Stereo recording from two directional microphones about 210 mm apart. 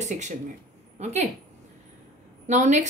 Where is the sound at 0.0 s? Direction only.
35° right (ahead or behind).